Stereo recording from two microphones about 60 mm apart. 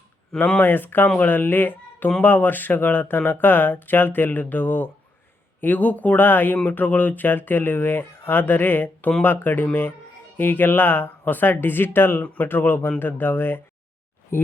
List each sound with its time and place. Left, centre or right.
0.6 s speech: left